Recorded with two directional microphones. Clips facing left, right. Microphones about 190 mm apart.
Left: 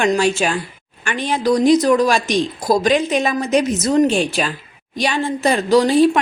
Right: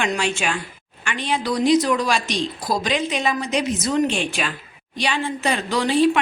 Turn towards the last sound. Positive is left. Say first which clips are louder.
# left 6 dB
turn(degrees=40)  # may be behind; listen again after turning